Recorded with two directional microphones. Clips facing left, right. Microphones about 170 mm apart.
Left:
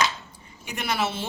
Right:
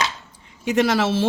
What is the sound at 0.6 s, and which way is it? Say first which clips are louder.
Speech: right 9 dB; 90° right.